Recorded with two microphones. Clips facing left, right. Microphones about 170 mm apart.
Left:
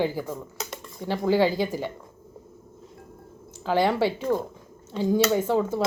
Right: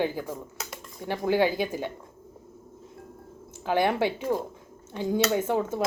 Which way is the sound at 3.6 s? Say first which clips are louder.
Left 2 dB; 20° right (ahead or behind).